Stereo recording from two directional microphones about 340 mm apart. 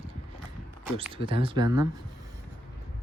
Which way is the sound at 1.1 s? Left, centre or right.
Centre.